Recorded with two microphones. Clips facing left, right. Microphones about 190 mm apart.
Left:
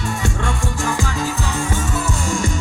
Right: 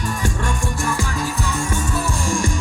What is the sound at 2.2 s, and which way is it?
Music, 20° left (ahead or behind).